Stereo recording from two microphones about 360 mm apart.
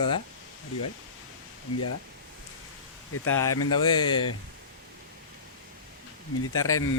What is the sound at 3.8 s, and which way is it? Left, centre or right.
Speech, centre.